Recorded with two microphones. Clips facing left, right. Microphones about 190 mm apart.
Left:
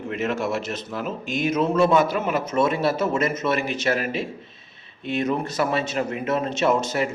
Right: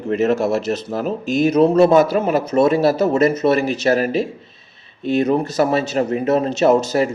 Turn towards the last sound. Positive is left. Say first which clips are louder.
# right 7 dB
turn(degrees=-40)  # may be behind; listen again after turning